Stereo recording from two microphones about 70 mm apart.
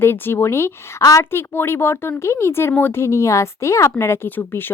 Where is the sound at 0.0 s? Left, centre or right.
Left.